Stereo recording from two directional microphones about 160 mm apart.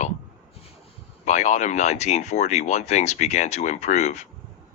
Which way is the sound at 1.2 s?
45° left (ahead or behind).